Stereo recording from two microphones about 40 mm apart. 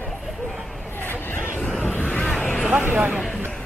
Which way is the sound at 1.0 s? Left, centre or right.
Left.